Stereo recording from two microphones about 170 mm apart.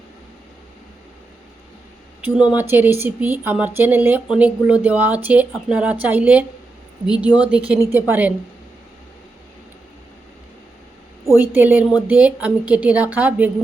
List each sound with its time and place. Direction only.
2.5 s speech: 10° right (ahead or behind)
11.3 s speech: 10° right (ahead or behind)